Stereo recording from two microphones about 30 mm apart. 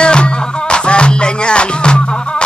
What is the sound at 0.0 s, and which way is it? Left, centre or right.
Music, left.